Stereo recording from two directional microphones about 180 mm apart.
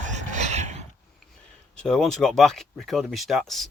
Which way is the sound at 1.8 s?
Centre (ahead or behind).